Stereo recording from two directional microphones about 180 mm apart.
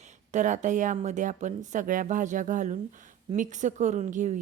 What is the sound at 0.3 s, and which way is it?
A woman's voice, 45° right (ahead or behind).